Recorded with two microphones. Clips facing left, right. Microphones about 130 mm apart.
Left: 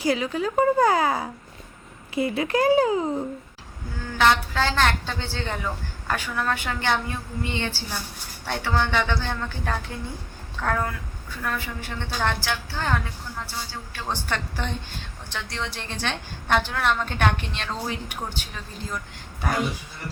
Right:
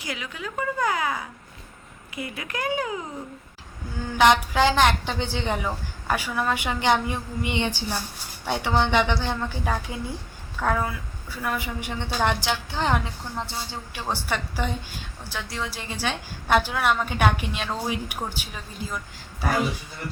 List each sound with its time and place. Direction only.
0.0 s a woman's voice: 35° left (ahead or behind)
4.2 s a woman's voice: 15° right (ahead or behind)
14.1 s a woman's voice: 10° right (ahead or behind)